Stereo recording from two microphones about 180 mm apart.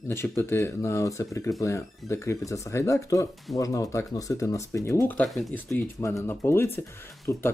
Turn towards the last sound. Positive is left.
turn(degrees=15)  # may be behind; listen again after turning